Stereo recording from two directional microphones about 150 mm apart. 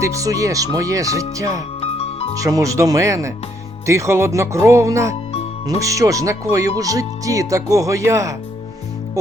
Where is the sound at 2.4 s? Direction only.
20° right (ahead or behind).